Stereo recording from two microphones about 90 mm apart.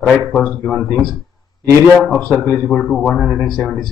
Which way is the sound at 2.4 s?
Centre (ahead or behind).